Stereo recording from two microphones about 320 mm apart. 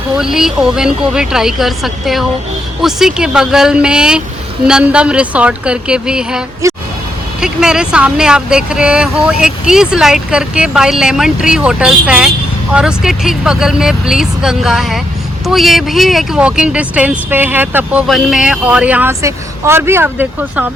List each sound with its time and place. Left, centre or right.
0.2 s speech: centre